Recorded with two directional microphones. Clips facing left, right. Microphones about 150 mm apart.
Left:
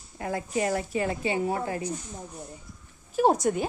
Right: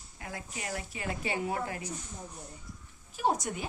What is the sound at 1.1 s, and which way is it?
Speech, 30° left (ahead or behind).